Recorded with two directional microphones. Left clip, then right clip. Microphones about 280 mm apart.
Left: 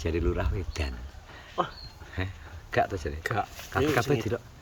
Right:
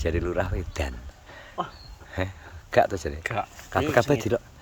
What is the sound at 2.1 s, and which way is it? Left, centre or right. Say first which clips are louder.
Speech: right 6 dB; centre.